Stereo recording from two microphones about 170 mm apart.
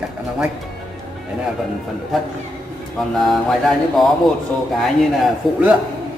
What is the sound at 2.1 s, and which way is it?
Mantra, centre (ahead or behind).